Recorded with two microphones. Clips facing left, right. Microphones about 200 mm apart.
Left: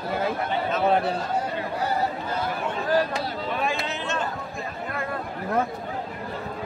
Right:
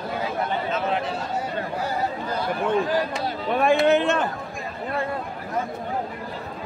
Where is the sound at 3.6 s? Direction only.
55° right (ahead or behind).